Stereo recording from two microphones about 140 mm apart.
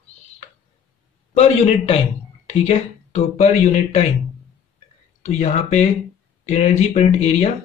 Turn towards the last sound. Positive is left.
turn(degrees=55)  # may be behind; listen again after turning